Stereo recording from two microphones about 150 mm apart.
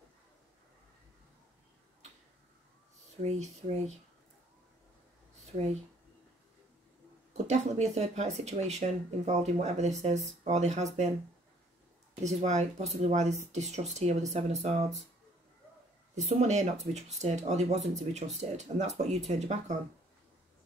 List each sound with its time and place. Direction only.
7.3 s speech: 50° right (ahead or behind)
12.2 s speech: 50° right (ahead or behind)
16.2 s speech: 50° right (ahead or behind)